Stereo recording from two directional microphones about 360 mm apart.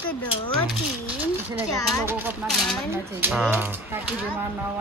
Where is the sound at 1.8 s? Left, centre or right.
Centre.